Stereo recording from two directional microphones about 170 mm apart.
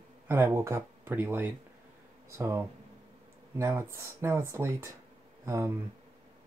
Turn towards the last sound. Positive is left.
turn(degrees=-15)  # may be behind; listen again after turning